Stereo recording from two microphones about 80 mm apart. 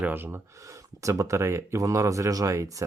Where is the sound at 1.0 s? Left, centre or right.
Right.